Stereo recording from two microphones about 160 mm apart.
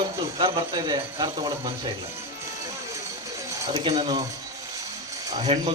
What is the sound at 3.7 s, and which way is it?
Speech, 30° right (ahead or behind).